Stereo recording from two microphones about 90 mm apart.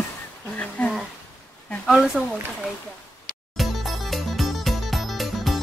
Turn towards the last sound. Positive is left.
turn(degrees=0)  # may be behind; listen again after turning